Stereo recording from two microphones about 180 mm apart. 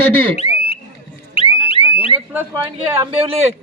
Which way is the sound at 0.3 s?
35° left (ahead or behind).